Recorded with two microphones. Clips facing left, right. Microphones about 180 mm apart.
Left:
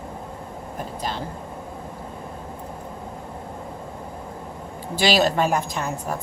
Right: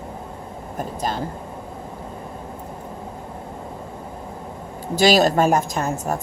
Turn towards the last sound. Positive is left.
turn(degrees=-45)  # may be behind; listen again after turning